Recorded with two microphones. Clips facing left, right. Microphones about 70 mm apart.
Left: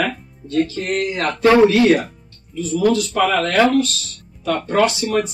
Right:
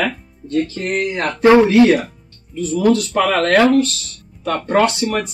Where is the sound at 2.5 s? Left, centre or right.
Right.